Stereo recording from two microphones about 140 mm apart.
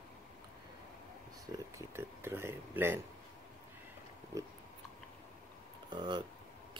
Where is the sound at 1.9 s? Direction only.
15° right (ahead or behind).